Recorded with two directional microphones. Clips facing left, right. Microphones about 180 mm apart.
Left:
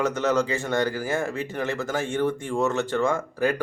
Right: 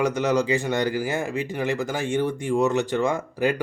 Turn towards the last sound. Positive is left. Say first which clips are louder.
# right 1 dB
turn(degrees=-20)  # may be behind; listen again after turning